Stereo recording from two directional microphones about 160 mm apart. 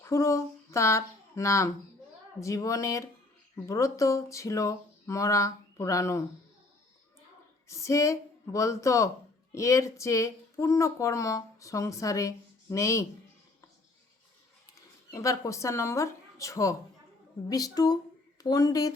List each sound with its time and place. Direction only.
0.0 s speech: 20° left (ahead or behind)
7.7 s speech: 20° left (ahead or behind)
15.1 s speech: 20° left (ahead or behind)